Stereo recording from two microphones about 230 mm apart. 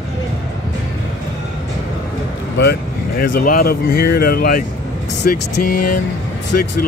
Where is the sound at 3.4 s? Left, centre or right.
Left.